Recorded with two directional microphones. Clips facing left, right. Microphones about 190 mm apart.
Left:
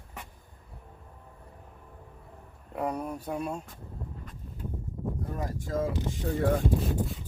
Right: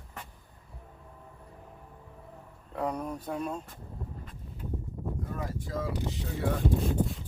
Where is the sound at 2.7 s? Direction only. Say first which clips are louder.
Left 1 dB; 10° left (ahead or behind).